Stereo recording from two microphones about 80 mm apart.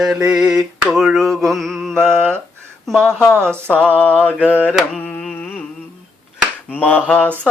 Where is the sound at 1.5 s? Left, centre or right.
Centre.